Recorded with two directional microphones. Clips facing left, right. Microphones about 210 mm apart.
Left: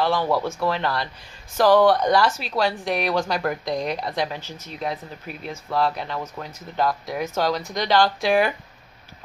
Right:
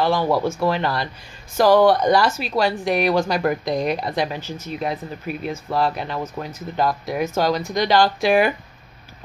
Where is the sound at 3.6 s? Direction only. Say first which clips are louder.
Right 4 dB; 50° right (ahead or behind).